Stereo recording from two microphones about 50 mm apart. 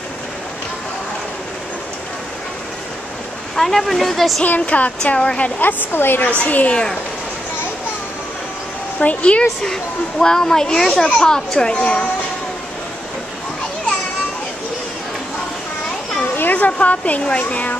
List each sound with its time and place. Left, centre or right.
3.5 s speech: centre
4.4 s speech: left
5.4 s a woman's voice: left
6.3 s speech: left
9.0 s speech: left
9.7 s a child's voice: centre
16.2 s speech: left